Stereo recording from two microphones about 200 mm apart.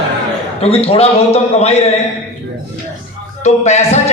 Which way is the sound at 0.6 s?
30° left (ahead or behind).